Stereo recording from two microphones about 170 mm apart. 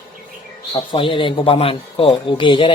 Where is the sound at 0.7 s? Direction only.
30° left (ahead or behind).